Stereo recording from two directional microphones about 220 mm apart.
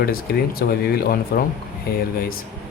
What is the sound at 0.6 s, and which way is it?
Speech, 45° left (ahead or behind).